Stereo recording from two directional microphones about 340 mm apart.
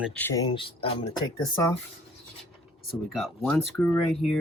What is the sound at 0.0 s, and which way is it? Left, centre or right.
Speech, centre.